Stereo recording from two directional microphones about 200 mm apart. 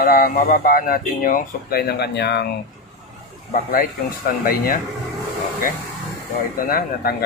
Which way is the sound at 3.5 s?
45° left (ahead or behind).